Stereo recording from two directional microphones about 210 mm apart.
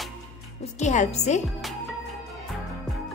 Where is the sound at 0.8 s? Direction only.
35° left (ahead or behind).